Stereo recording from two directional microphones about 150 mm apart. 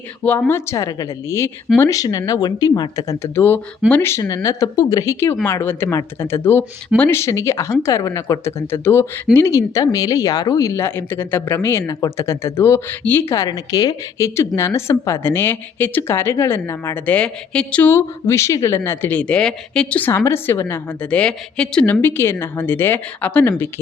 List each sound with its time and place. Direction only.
0.3 s speech: 15° left (ahead or behind)